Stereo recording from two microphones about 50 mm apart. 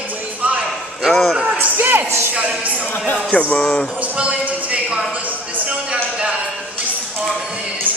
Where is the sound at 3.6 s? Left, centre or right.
Centre.